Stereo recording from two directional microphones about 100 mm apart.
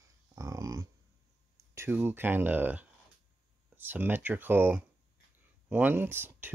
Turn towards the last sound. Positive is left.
turn(degrees=-20)  # may be behind; listen again after turning